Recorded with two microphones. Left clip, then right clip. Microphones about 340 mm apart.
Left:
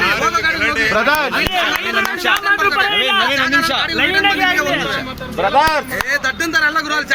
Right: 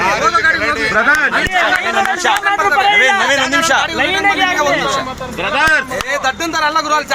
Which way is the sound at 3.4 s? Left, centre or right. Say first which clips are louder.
Right 2 dB; centre.